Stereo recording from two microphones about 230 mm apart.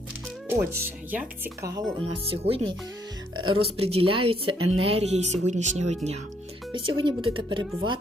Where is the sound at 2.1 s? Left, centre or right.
Right.